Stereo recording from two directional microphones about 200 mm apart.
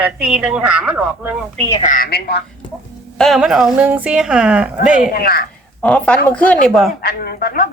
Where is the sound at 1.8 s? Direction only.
40° left (ahead or behind).